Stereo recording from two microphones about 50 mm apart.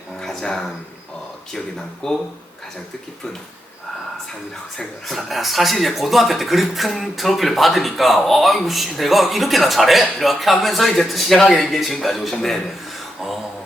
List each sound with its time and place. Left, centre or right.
0.2 s a sound: centre
2.0 s speech: centre
4.8 s speech: centre